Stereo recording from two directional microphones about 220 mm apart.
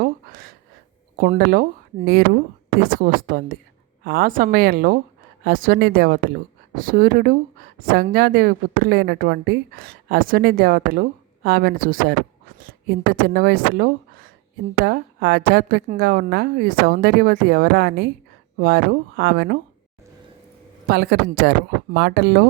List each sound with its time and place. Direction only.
0.0 s gasp: 40° right (ahead or behind)
1.2 s a woman's voice: 40° right (ahead or behind)
4.0 s a woman's voice: 45° right (ahead or behind)
20.8 s a woman's voice: 45° right (ahead or behind)